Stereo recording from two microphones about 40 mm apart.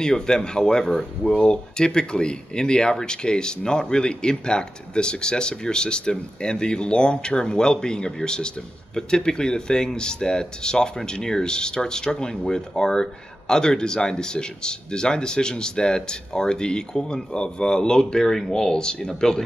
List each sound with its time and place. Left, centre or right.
0.0 s speech: centre